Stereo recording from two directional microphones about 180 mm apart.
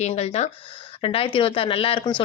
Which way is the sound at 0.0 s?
35° left (ahead or behind).